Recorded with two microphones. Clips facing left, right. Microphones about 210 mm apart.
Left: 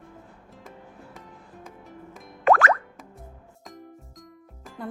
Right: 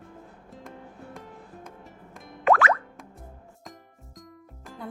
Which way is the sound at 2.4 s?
45° left (ahead or behind).